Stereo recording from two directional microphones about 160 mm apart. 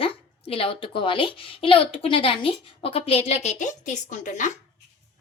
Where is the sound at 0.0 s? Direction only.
35° left (ahead or behind); by 4.5 s 50° left (ahead or behind).